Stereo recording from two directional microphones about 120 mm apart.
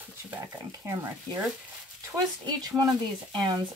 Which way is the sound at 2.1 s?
35° right (ahead or behind).